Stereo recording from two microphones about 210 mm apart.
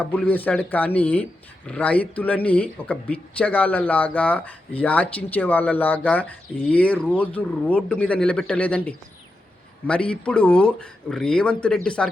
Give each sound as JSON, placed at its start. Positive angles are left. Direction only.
{"t": 0.0, "sound": "speech", "side_deg": 10}